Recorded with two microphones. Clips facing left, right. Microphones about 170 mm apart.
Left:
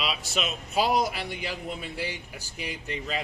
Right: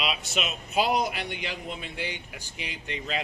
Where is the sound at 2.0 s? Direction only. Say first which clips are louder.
Left 1 dB; 35° left (ahead or behind).